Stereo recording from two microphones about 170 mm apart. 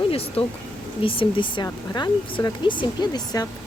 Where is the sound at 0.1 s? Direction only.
35° left (ahead or behind).